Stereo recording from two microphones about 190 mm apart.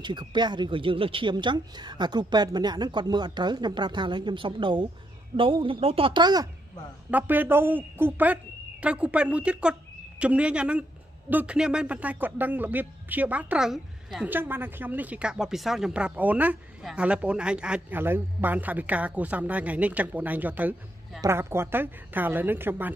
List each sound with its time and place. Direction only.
0.0 s speech: 25° right (ahead or behind)
7.1 s a woman's voice: 10° right (ahead or behind)